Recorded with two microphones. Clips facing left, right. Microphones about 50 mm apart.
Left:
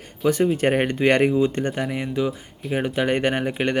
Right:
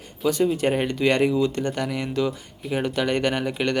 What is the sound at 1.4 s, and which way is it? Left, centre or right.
Speech, left.